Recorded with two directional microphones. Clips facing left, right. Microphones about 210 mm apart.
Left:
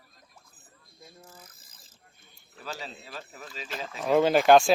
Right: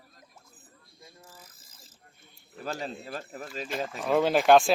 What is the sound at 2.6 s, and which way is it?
Speech, 50° right (ahead or behind).